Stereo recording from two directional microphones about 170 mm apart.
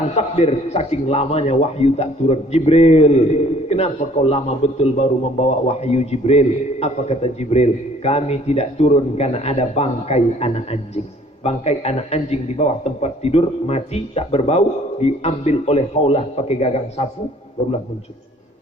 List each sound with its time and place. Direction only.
0.2 s a man's voice: 40° left (ahead or behind)